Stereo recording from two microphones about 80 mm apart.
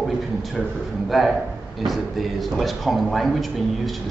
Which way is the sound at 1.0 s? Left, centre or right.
Centre.